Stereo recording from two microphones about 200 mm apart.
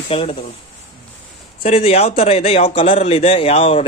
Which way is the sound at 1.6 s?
30° left (ahead or behind).